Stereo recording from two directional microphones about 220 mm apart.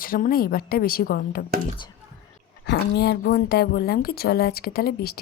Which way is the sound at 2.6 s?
50° left (ahead or behind).